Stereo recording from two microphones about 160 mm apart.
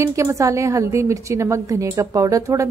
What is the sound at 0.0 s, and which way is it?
A woman's voice, 20° right (ahead or behind).